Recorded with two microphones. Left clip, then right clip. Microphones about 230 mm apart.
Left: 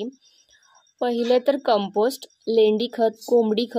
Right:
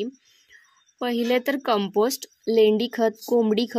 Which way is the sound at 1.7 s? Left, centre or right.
Right.